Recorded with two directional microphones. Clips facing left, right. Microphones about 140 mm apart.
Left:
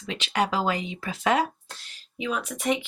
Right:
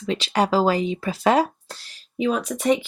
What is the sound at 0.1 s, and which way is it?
Speech, 35° right (ahead or behind).